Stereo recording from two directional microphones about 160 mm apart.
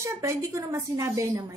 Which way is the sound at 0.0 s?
20° right (ahead or behind).